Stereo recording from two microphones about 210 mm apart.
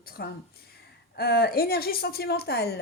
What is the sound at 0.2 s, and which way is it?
Speech, 50° left (ahead or behind).